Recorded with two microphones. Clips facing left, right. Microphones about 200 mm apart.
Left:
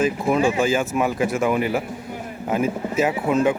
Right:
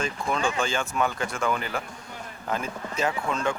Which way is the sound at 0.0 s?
5° left (ahead or behind).